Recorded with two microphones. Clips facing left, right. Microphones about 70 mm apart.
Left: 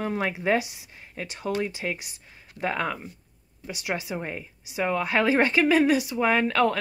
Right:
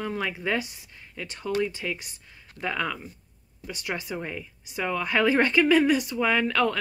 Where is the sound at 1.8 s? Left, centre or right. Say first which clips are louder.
Left 1 dB; left.